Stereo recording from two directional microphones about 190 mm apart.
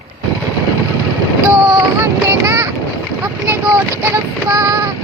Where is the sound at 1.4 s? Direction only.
15° right (ahead or behind).